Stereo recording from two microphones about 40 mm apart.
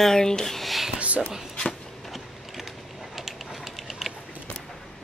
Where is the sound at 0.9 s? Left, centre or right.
Right.